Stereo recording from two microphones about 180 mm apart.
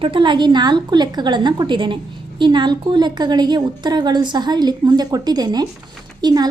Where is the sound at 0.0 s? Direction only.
25° right (ahead or behind).